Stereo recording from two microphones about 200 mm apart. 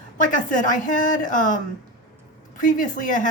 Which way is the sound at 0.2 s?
40° left (ahead or behind).